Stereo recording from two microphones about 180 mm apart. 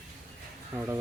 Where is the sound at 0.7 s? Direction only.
15° right (ahead or behind).